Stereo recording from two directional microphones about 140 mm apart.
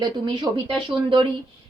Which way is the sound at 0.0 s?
30° right (ahead or behind).